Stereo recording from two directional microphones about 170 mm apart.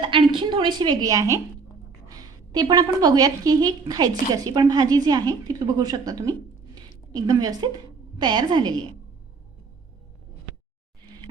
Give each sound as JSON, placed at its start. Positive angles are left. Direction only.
{"t": 0.0, "sound": "a woman's voice", "side_deg": -30}